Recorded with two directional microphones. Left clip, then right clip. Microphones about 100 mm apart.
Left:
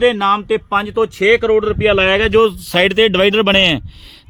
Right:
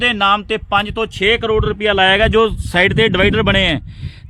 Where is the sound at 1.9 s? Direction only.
55° right (ahead or behind).